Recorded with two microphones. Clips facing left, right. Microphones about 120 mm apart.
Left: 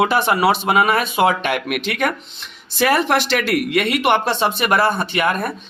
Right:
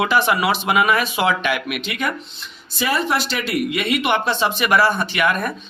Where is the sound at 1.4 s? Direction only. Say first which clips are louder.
Left 2 dB; 50° left (ahead or behind).